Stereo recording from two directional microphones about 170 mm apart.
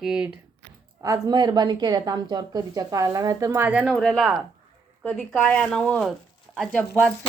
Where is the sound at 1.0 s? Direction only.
20° right (ahead or behind).